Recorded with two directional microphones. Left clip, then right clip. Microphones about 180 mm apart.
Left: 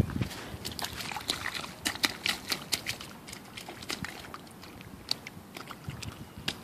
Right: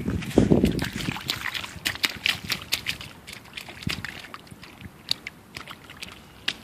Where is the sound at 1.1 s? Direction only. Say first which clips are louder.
Right 3 dB; 10° left (ahead or behind).